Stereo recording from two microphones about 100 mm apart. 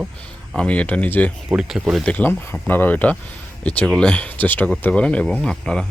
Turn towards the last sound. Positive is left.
turn(degrees=5)  # may be behind; listen again after turning